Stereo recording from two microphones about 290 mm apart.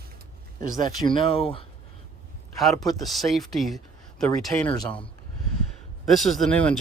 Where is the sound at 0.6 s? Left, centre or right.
Right.